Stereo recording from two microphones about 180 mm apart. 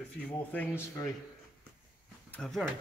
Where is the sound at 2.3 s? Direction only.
5° left (ahead or behind).